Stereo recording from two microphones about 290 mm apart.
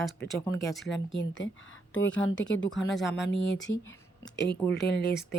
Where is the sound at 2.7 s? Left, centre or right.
Centre.